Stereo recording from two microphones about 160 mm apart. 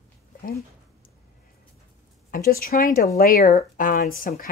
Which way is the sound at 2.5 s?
65° left (ahead or behind).